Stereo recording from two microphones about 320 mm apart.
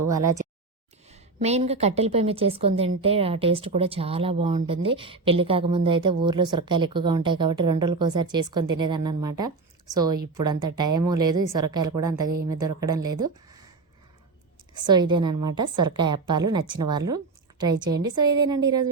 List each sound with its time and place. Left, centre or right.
0.1 s speech: centre
1.0 s a woman's voice: centre
14.8 s speech: centre